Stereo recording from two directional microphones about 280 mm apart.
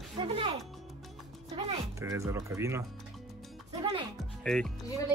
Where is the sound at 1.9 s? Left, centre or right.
Centre.